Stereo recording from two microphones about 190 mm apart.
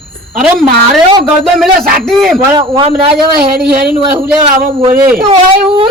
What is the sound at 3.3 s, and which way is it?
A man's voice, 55° right (ahead or behind).